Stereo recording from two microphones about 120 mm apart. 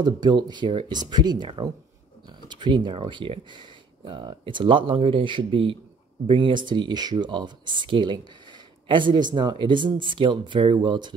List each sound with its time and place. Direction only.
0.0 s speech: 40° right (ahead or behind)